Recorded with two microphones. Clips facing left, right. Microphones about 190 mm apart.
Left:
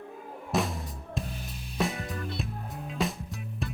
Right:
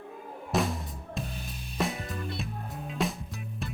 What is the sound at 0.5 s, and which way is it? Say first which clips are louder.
Music: right 1 dB; centre (ahead or behind).